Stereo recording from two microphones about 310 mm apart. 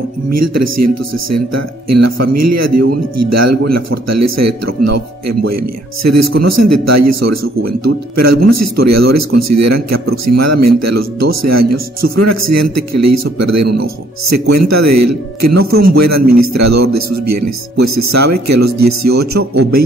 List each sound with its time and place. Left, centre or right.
0.3 s speech: right